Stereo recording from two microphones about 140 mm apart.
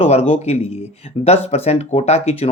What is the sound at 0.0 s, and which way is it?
Speech, 45° left (ahead or behind).